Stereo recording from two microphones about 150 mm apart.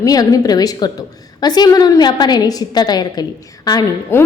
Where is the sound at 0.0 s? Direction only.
25° left (ahead or behind).